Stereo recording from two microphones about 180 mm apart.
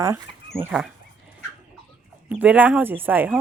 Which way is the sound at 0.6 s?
5° right (ahead or behind).